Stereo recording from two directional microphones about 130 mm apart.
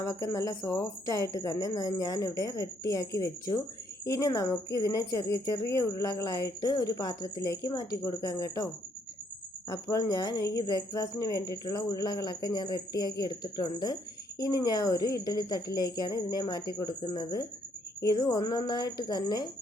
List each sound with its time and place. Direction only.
0.0 s speech: 25° left (ahead or behind)